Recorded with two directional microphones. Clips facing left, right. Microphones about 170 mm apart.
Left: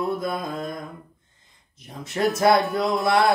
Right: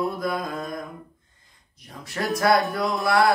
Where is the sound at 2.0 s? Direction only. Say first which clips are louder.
Left 4 dB; 20° left (ahead or behind).